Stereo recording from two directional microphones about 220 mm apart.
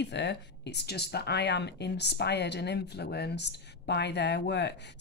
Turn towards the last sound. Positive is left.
turn(degrees=50)  # may be behind; listen again after turning